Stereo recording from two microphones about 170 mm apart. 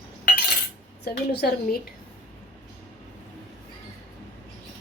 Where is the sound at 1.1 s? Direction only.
70° left (ahead or behind).